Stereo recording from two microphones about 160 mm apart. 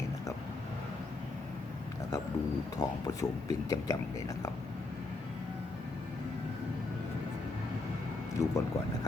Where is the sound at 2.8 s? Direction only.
25° left (ahead or behind).